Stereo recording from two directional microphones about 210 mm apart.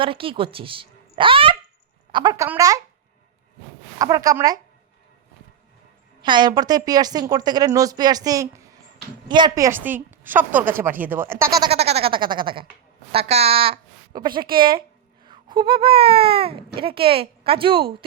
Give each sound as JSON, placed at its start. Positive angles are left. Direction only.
{"t": 0.0, "sound": "a woman's voice", "side_deg": -25}
{"t": 3.9, "sound": "a woman's voice", "side_deg": -15}
{"t": 6.2, "sound": "a woman's voice", "side_deg": -20}
{"t": 11.7, "sound": "a sound", "side_deg": -30}
{"t": 13.1, "sound": "a woman's voice", "side_deg": -30}
{"t": 15.3, "sound": "a sound", "side_deg": -20}
{"t": 16.8, "sound": "a woman's voice", "side_deg": -25}